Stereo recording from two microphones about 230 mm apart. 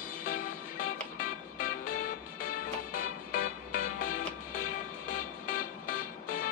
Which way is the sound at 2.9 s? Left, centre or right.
Left.